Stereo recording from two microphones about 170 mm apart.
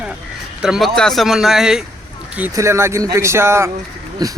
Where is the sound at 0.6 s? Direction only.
Centre (ahead or behind).